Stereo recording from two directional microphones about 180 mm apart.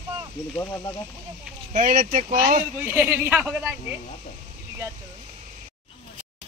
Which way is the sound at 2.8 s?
10° right (ahead or behind).